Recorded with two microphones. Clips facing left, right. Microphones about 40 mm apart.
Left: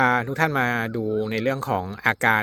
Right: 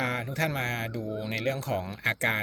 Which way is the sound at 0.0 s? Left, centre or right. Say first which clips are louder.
Left 9 dB; left.